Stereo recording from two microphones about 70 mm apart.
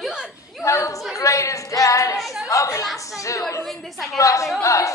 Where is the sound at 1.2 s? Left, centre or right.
Left.